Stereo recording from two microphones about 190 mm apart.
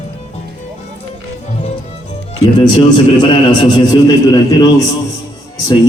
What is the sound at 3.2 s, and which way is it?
A man's voice, 25° left (ahead or behind).